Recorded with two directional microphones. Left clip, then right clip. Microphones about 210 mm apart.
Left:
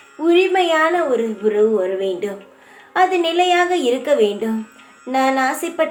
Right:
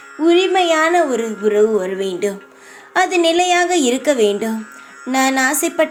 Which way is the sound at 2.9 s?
45° right (ahead or behind).